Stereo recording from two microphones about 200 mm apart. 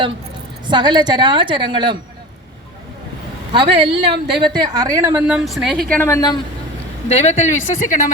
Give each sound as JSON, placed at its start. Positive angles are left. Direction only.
{"t": 0.7, "sound": "a woman's voice", "side_deg": -20}
{"t": 3.7, "sound": "speech", "side_deg": -55}
{"t": 4.3, "sound": "a woman's voice", "side_deg": -20}
{"t": 5.2, "sound": "a woman's voice", "side_deg": -5}
{"t": 5.9, "sound": "speech", "side_deg": 10}
{"t": 7.1, "sound": "speech", "side_deg": 35}